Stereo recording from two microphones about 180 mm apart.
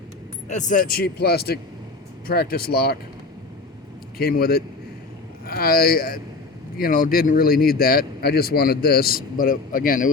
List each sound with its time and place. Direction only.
0.4 s speech: 45° left (ahead or behind)
4.2 s speech: 55° left (ahead or behind)